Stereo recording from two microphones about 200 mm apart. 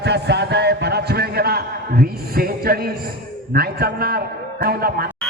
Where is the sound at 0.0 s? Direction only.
60° right (ahead or behind).